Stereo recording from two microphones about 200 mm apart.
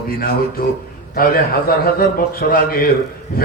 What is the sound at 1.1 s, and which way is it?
Speech, 45° left (ahead or behind).